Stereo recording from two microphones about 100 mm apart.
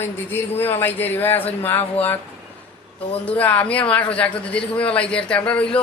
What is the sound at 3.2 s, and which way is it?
A man's voice, 15° left (ahead or behind).